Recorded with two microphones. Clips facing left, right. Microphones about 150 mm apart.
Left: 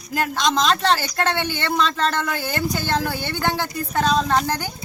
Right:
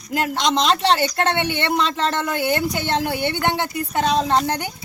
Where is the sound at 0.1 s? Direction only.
20° right (ahead or behind).